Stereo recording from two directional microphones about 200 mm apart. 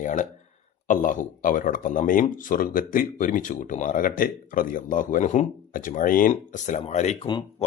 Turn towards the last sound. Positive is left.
turn(degrees=35)  # may be behind; listen again after turning